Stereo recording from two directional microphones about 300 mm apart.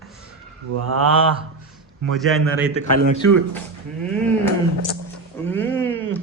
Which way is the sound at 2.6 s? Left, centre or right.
Left.